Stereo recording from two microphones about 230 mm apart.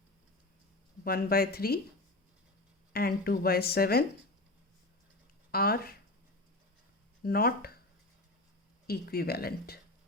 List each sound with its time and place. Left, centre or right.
1.0 s a woman's voice: left
2.9 s a woman's voice: left
5.5 s a woman's voice: left
7.3 s a woman's voice: left
8.9 s a woman's voice: left